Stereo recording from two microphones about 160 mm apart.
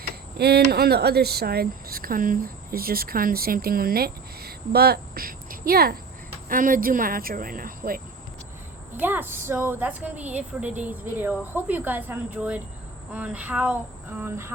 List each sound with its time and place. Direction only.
0.3 s speech: 85° right; by 6.0 s 70° right (ahead or behind)
6.5 s insect: 60° right (ahead or behind)
9.0 s a woman's voice: 10° right (ahead or behind)